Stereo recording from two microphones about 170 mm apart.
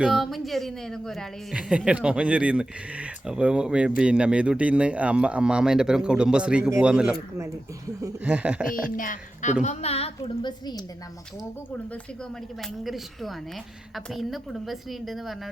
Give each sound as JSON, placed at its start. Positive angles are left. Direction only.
{"t": 0.0, "sound": "a woman's voice", "side_deg": 0}
{"t": 8.2, "sound": "a sound", "side_deg": -10}
{"t": 8.7, "sound": "speech", "side_deg": 50}
{"t": 9.6, "sound": "a woman's voice", "side_deg": 35}
{"t": 12.8, "sound": "a woman's voice", "side_deg": 0}